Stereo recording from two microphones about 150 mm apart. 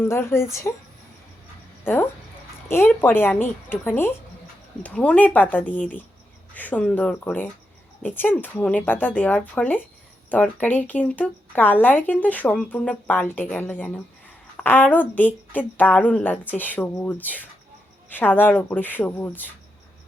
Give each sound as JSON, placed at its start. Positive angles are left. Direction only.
{"t": 0.0, "sound": "a woman's voice", "side_deg": 15}